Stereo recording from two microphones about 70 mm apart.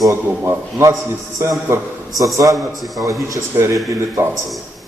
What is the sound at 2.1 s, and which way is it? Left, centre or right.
A man's voice, right.